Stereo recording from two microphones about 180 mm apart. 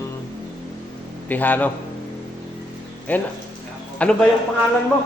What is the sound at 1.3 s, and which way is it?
Mantra, 10° left (ahead or behind).